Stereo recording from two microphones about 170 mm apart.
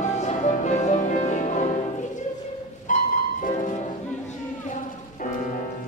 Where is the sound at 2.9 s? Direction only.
50° left (ahead or behind).